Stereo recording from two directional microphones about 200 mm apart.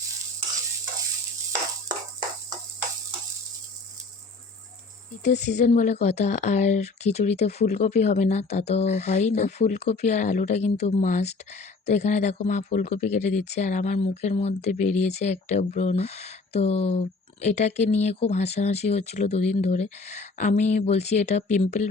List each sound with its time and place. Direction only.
5.2 s speech: 35° left (ahead or behind)